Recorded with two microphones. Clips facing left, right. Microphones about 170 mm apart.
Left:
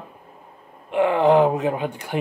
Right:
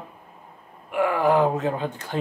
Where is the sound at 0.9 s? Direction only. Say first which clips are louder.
Left 4 dB; 25° left (ahead or behind).